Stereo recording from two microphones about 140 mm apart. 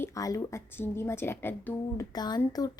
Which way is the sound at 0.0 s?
25° left (ahead or behind).